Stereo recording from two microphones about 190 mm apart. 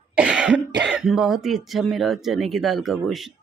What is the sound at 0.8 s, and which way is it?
Speech, 5° right (ahead or behind).